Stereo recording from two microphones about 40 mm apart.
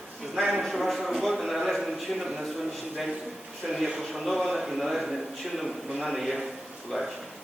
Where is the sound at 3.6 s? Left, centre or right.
Centre.